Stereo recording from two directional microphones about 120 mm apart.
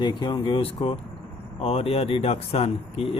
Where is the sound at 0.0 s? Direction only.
35° left (ahead or behind).